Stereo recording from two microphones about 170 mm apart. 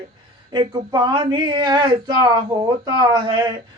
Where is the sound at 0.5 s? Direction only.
25° right (ahead or behind).